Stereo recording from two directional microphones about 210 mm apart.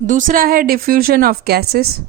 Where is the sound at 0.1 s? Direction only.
40° right (ahead or behind).